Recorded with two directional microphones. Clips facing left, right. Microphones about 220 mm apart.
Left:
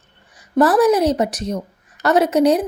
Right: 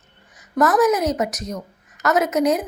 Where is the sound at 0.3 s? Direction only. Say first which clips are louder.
Left 3 dB; 30° left (ahead or behind).